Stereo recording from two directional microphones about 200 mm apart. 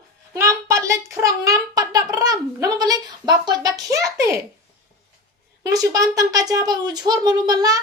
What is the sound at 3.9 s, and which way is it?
Speech, 15° right (ahead or behind).